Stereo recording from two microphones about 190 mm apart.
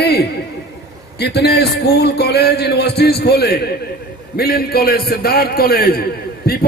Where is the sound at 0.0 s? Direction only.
60° left (ahead or behind).